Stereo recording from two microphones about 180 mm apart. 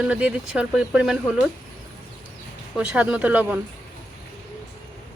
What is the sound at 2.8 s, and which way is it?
Speech, 5° right (ahead or behind).